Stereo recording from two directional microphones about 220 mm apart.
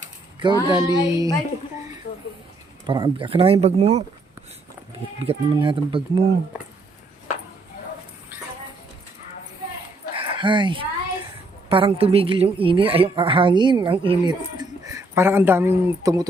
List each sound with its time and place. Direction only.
0.3 s a woman's voice: 20° right (ahead or behind)
2.8 s a woman's voice: 20° right (ahead or behind)
5.2 s a woman's voice: 25° right (ahead or behind)
10.2 s a sound: 20° right (ahead or behind)
11.7 s a woman's voice: 25° right (ahead or behind)